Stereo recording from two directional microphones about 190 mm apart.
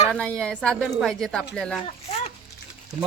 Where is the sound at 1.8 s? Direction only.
30° left (ahead or behind).